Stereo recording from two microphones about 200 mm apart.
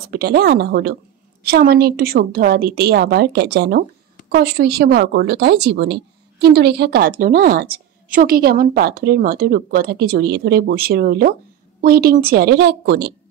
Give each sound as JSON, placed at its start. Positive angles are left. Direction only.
{"t": 0.1, "sound": "a woman's voice", "side_deg": -50}